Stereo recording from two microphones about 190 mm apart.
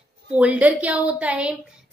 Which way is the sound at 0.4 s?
10° right (ahead or behind).